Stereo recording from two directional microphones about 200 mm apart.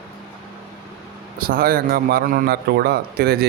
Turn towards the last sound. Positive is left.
turn(degrees=-50)  # may be behind; listen again after turning